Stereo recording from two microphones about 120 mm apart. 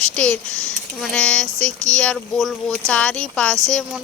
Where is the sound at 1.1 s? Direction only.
5° left (ahead or behind).